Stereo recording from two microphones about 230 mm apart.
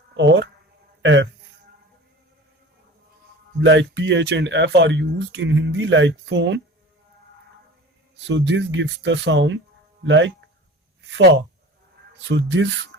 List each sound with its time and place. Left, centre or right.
0.1 s speech: right
1.0 s a sound: right
3.6 s speech: right
8.1 s speech: right